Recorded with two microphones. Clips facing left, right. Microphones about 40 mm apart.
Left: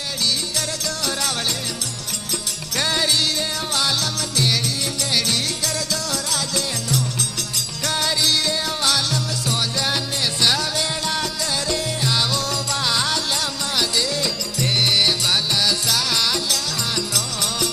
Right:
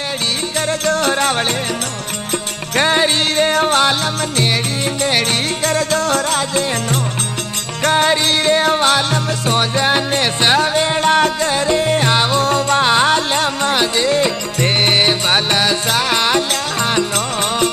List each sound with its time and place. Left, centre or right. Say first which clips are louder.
0.6 s music: right 10 dB; right
2.7 s music: right 7 dB; right
5.0 s music: right 6 dB; right